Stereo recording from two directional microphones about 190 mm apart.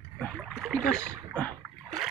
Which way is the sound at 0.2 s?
5° left (ahead or behind).